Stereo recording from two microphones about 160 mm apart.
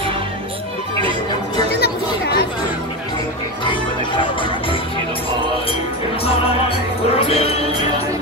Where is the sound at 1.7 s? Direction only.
90° left.